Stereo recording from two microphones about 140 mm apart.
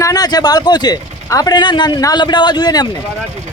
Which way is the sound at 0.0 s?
25° left (ahead or behind).